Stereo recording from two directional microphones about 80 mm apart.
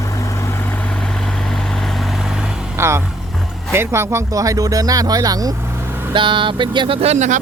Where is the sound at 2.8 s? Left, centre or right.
Right.